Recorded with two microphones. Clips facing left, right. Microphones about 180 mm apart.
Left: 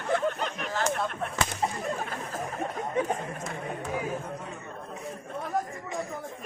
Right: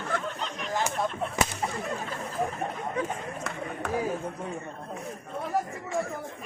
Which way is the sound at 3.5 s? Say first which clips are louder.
Even; 65° right (ahead or behind).